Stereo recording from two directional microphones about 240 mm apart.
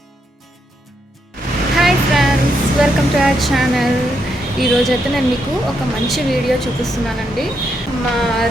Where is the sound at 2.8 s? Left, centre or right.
Centre.